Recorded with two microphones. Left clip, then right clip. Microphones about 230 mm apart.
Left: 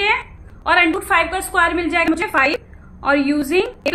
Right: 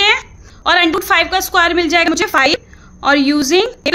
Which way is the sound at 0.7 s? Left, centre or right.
Right.